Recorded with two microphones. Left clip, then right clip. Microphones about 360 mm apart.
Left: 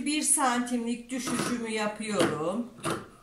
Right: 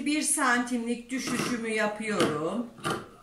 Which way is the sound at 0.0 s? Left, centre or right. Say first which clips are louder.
Even; centre.